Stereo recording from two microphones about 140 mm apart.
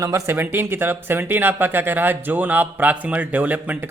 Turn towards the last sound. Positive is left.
turn(degrees=-10)  # may be behind; listen again after turning